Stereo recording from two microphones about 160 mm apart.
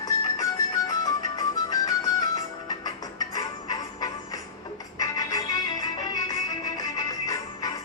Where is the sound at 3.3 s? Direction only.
25° left (ahead or behind).